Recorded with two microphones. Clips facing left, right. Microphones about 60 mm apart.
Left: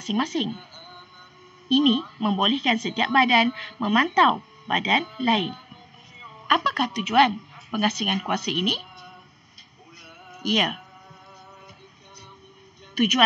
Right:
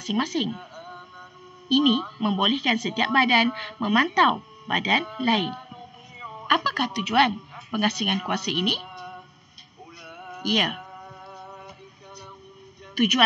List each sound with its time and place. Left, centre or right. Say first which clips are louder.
0.0 s a woman's voice: even; centre
8.8 s a sound: right 6 dB; centre
10.0 s music: even; centre
10.8 s music: right 6 dB; right
12.9 s a woman's voice: even; centre